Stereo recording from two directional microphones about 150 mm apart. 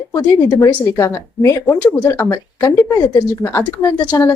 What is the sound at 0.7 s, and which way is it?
Speech, 20° left (ahead or behind).